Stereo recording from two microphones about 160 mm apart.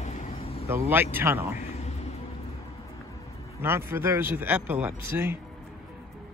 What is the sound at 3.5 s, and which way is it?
Speech, 15° right (ahead or behind).